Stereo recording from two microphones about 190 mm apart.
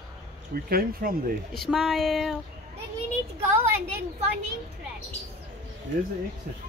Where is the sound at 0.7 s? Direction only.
50° right (ahead or behind).